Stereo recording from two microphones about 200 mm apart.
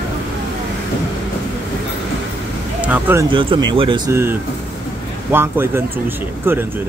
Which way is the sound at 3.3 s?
25° right (ahead or behind).